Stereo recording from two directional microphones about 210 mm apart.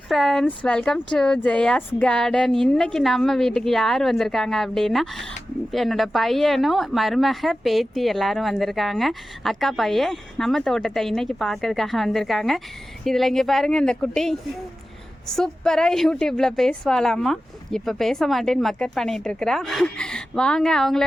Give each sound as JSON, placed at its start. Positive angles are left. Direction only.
{"t": 0.1, "sound": "a woman's voice", "side_deg": 0}